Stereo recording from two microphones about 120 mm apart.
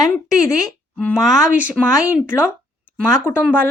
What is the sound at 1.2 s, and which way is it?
Speech, 5° right (ahead or behind).